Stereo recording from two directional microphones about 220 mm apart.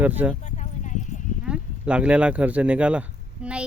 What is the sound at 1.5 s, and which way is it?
Speech, 5° right (ahead or behind).